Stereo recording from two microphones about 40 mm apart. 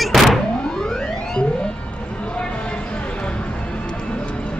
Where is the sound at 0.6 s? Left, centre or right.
Centre.